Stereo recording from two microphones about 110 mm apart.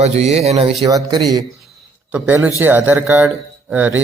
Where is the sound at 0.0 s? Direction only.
80° right.